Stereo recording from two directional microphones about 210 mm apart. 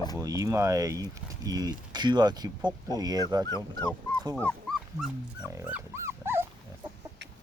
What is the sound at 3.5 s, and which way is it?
Speech, 15° left (ahead or behind).